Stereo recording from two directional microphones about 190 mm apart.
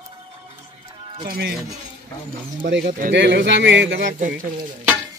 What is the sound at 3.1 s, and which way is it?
Speech, 70° right (ahead or behind).